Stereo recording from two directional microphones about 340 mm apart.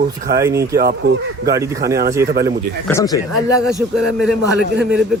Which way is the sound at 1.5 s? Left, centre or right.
Centre.